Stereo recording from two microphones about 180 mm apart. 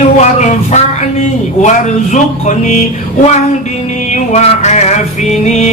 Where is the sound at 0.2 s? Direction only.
40° left (ahead or behind).